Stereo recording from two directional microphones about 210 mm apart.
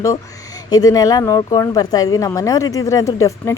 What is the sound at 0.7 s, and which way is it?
A woman's voice, 20° left (ahead or behind).